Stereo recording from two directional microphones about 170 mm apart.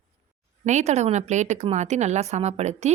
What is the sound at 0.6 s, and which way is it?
Speech, 45° right (ahead or behind).